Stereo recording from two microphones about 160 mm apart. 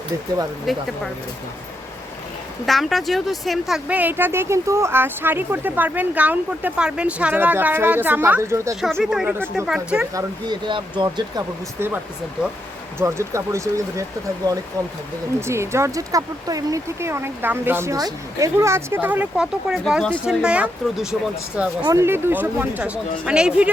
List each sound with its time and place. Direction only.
0.7 s speech: centre (ahead or behind)
2.6 s speech: centre (ahead or behind); by 8.7 s 15° right (ahead or behind)
8.7 s speech: centre (ahead or behind)
10.2 s speech: 30° right (ahead or behind)
13.0 s speech: 15° right (ahead or behind)
15.4 s speech: 15° right (ahead or behind)